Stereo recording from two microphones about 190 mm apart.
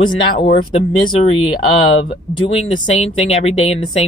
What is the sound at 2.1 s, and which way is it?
Speech, 35° left (ahead or behind).